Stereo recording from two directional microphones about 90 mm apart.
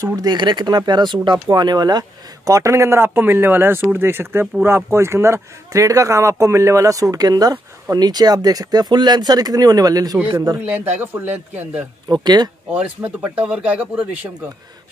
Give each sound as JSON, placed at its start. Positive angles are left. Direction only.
{"t": 0.0, "sound": "speech", "side_deg": -45}
{"t": 10.1, "sound": "a man's voice", "side_deg": -20}
{"t": 12.1, "sound": "speech", "side_deg": -50}
{"t": 12.7, "sound": "speech", "side_deg": -15}